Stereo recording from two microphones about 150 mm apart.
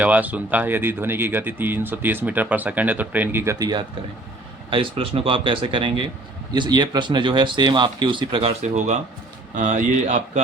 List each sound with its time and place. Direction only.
0.0 s speech: 10° right (ahead or behind); by 10.4 s 55° right (ahead or behind)